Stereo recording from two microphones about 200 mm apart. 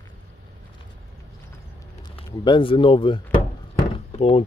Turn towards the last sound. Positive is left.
turn(degrees=30)  # may be behind; listen again after turning